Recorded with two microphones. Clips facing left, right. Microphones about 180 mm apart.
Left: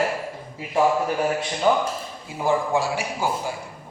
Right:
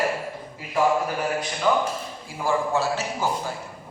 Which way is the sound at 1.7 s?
30° left (ahead or behind).